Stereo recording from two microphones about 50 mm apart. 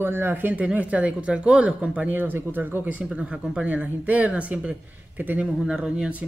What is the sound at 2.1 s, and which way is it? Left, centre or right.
Speech, right.